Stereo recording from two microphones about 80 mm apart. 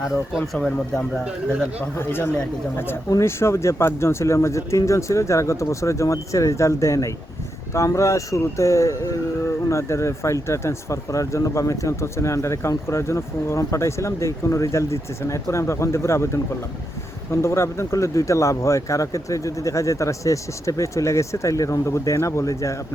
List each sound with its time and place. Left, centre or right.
0.0 s speech: centre
2.0 s speech: left
17.4 s speech: left